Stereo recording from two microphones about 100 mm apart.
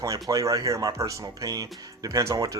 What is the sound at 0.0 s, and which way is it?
Speech, 35° right (ahead or behind).